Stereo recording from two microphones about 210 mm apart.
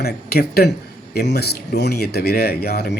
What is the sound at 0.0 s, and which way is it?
Speech, 45° left (ahead or behind).